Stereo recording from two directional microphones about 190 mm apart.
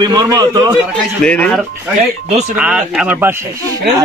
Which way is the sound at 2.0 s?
35° right (ahead or behind).